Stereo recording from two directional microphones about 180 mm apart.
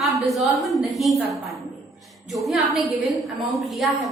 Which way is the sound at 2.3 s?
Centre (ahead or behind).